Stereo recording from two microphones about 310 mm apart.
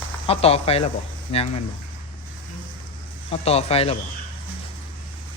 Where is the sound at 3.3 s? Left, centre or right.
Centre.